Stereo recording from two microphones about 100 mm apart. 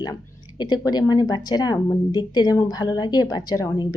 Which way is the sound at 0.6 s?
45° left (ahead or behind).